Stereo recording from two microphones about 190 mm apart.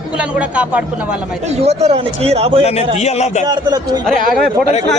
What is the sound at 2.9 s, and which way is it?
Speech, 35° left (ahead or behind).